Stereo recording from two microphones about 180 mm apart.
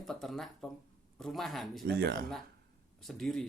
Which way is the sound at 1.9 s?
60° right (ahead or behind).